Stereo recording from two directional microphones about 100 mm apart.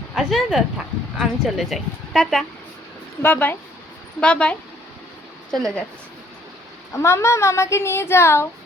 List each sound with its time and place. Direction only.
0.1 s a woman's voice: 5° right (ahead or behind)
3.2 s a woman's voice: 20° left (ahead or behind)
6.9 s speech: 30° left (ahead or behind)